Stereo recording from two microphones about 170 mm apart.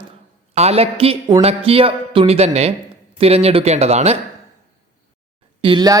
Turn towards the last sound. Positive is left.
turn(degrees=-25)  # may be behind; listen again after turning